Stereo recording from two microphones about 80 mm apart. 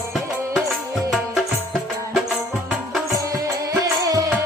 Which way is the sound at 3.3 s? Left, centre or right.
Right.